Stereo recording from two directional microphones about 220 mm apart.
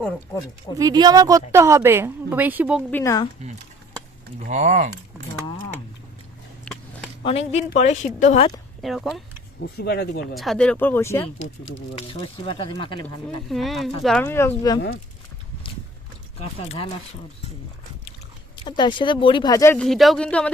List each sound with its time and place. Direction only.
0.8 s a woman's voice: 20° right (ahead or behind)
2.9 s speech: 15° left (ahead or behind)
4.4 s speech: 35° right (ahead or behind)
6.7 s a sound: 5° left (ahead or behind)
7.3 s speech: 25° left (ahead or behind)
8.8 s speech: centre (ahead or behind)
9.7 s speech: 45° left (ahead or behind)
10.3 s speech: centre (ahead or behind)
11.9 s speech: 25° left (ahead or behind)
13.5 s speech: centre (ahead or behind)
16.4 s speech: 25° left (ahead or behind)
18.6 s speech: 20° left (ahead or behind)
19.8 s speech: centre (ahead or behind)